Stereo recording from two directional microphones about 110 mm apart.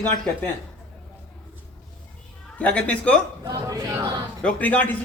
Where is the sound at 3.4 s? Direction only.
35° right (ahead or behind).